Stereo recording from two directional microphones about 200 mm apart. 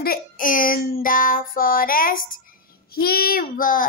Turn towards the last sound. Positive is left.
turn(degrees=45)  # may be behind; listen again after turning